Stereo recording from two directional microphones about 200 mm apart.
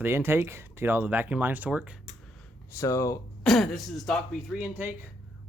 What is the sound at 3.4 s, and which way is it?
Speech, centre (ahead or behind).